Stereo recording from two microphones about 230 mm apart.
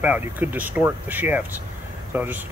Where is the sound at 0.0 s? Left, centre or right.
Centre.